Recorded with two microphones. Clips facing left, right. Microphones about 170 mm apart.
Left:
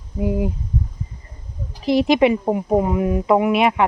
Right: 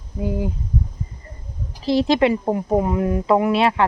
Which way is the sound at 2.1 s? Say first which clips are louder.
Left 2 dB; 15° left (ahead or behind).